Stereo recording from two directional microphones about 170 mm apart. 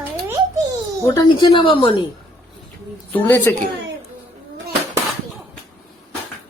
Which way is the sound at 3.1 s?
10° left (ahead or behind).